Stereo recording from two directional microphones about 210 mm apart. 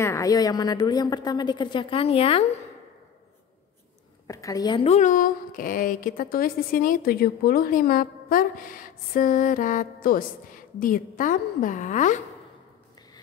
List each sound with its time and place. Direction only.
0.0 s a woman's voice: 15° left (ahead or behind)
4.3 s a woman's voice: 15° left (ahead or behind); by 12.2 s 35° left (ahead or behind)